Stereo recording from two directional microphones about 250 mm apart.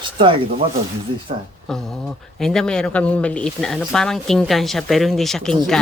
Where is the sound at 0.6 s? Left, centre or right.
Right.